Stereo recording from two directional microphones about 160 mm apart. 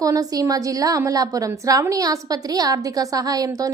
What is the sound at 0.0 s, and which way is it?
A woman's voice, 20° right (ahead or behind).